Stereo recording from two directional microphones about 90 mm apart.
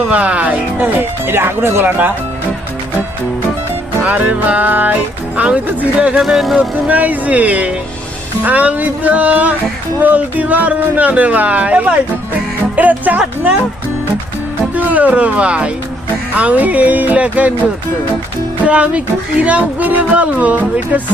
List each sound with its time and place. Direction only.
0.1 s speech: 15° right (ahead or behind)
4.0 s speech: 20° right (ahead or behind)
6.2 s speech: centre (ahead or behind)
6.6 s speech: 20° right (ahead or behind)
14.8 s speech: 15° right (ahead or behind)
18.6 s speech: 15° right (ahead or behind)